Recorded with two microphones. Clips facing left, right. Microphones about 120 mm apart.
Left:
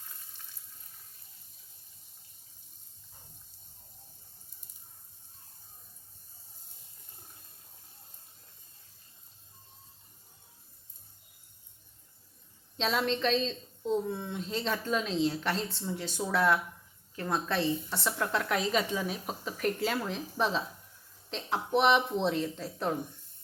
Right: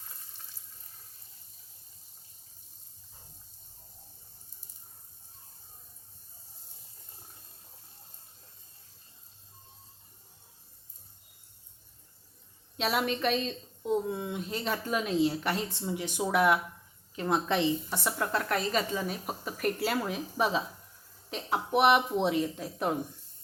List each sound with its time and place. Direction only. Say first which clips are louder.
12.7 s a woman's voice: even; 10° right (ahead or behind)
18.2 s a woman's voice: even; centre (ahead or behind)